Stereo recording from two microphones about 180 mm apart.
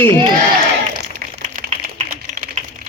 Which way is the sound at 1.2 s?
50° right (ahead or behind).